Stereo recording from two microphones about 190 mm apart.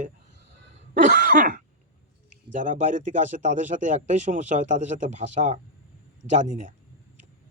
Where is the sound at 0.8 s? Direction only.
50° right (ahead or behind).